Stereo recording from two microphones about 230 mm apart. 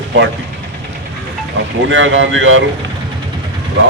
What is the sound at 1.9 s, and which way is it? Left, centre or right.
Speech, right.